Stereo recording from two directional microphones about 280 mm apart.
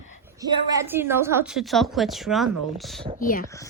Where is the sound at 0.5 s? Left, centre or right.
Centre.